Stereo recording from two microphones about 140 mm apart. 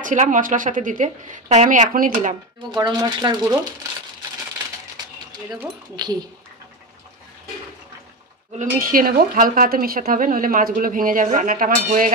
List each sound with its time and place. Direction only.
0.0 s speech: 65° right (ahead or behind)
2.7 s speech: 30° right (ahead or behind)
6.0 s speech: 30° right (ahead or behind)
8.5 s speech: 85° right